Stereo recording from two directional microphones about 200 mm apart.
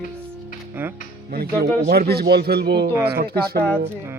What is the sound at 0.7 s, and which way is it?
Speech, 10° right (ahead or behind).